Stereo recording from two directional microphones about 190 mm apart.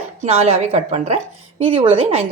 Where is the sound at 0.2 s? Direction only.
35° right (ahead or behind).